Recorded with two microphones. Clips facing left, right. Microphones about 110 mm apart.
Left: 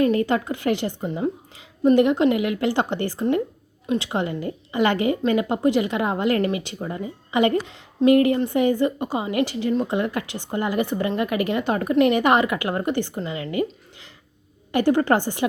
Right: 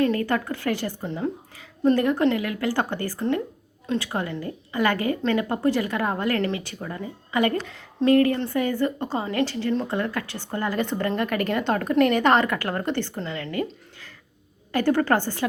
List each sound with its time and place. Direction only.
0.0 s a woman's voice: 20° left (ahead or behind)